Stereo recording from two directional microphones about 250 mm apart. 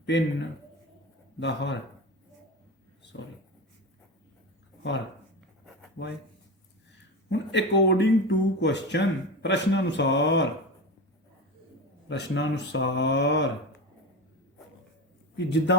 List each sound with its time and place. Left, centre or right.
1.4 s speech: left
6.0 s speech: left
7.3 s speech: left
12.0 s speech: left
15.4 s speech: left